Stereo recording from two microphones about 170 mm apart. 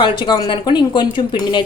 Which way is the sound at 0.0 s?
30° left (ahead or behind).